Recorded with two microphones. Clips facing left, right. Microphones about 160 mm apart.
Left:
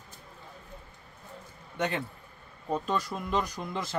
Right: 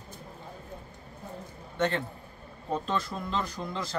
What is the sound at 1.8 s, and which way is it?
A man's voice, 10° left (ahead or behind).